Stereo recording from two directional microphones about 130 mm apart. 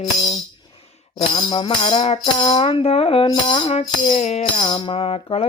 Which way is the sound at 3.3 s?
35° left (ahead or behind).